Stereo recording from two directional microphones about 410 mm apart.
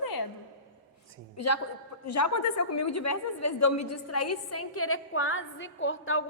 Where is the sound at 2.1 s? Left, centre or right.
Left.